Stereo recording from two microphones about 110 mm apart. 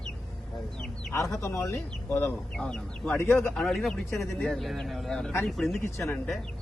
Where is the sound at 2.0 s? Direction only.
15° left (ahead or behind); by 5.7 s centre (ahead or behind).